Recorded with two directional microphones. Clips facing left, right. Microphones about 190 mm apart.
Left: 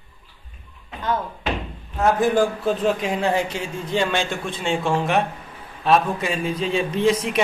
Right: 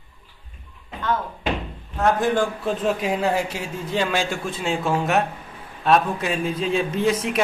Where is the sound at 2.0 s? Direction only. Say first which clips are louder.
Left 2 dB; 5° left (ahead or behind).